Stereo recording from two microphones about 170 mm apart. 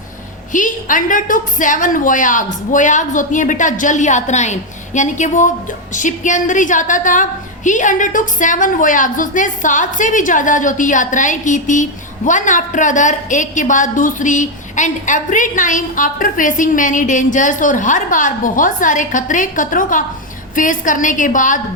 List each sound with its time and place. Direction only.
0.5 s a woman's voice: 50° left (ahead or behind)